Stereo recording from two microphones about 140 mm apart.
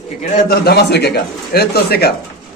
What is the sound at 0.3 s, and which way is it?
A man's voice, 90° left.